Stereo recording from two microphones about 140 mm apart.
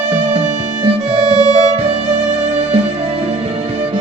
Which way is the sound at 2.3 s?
55° right (ahead or behind).